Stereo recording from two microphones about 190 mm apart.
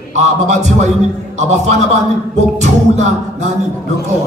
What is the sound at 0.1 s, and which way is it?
Speech, 40° right (ahead or behind).